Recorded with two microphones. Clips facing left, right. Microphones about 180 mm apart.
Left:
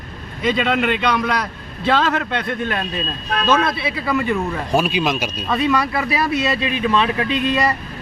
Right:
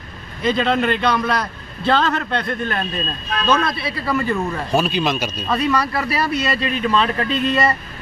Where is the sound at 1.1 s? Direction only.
Centre (ahead or behind).